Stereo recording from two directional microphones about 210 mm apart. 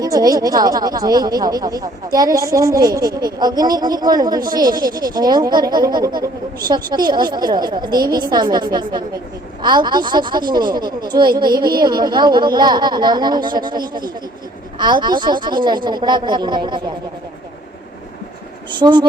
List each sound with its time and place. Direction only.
0.0 s a woman's voice: 15° right (ahead or behind)
18.8 s a woman's voice: 20° right (ahead or behind)